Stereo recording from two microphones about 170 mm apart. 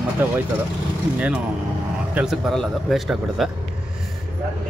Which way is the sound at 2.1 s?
Centre (ahead or behind).